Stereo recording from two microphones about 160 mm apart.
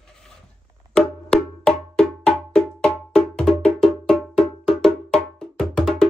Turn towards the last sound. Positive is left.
turn(degrees=5)  # may be behind; listen again after turning